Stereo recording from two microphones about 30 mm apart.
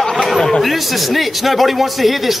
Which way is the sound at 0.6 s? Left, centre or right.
Centre.